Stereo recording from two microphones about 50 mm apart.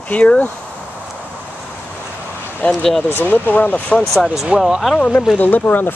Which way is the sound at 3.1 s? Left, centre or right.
Left.